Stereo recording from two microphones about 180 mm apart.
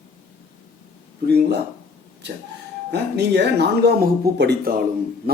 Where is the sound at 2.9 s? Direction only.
65° right (ahead or behind).